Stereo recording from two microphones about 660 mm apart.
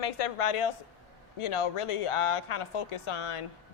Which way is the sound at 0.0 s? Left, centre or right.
Left.